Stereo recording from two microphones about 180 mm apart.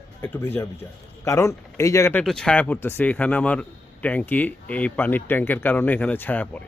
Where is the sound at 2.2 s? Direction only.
5° left (ahead or behind).